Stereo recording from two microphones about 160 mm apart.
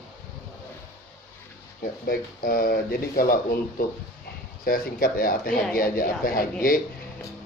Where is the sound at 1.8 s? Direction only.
65° left (ahead or behind).